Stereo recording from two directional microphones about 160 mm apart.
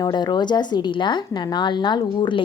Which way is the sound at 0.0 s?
25° left (ahead or behind).